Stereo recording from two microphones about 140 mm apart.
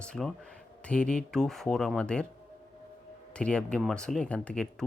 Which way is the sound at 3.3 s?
5° left (ahead or behind).